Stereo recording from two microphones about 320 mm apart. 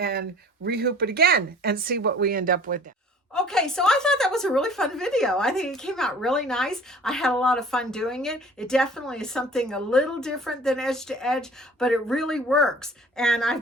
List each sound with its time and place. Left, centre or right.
0.0 s a woman's voice: right
3.3 s a woman's voice: centre